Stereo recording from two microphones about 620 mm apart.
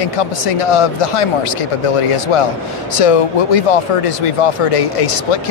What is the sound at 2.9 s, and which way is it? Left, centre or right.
Speech, left.